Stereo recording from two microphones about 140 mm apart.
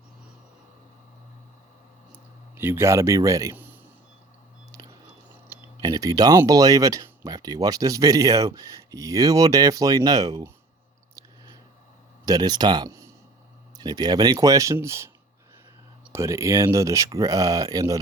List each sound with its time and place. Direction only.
2.6 s speech: 15° right (ahead or behind)
5.8 s speech: 25° right (ahead or behind)
12.2 s speech: 30° right (ahead or behind)
16.1 s speech: 20° right (ahead or behind)